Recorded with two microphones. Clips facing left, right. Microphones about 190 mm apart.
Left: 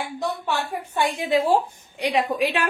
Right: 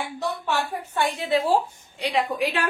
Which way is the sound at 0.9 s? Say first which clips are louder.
Left 2 dB; 15° left (ahead or behind).